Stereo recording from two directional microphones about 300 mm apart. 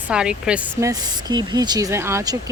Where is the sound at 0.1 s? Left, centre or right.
Centre.